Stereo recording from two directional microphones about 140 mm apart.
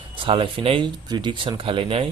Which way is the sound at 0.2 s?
40° right (ahead or behind).